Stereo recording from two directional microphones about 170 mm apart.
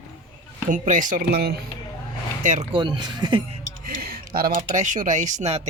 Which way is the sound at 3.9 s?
60° right (ahead or behind).